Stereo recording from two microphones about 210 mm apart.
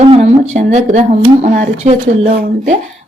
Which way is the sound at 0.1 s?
30° right (ahead or behind).